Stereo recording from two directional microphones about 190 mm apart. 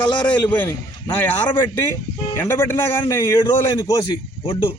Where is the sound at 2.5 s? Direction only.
15° left (ahead or behind).